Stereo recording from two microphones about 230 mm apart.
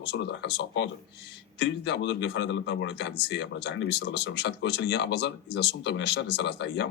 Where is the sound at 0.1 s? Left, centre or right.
Left.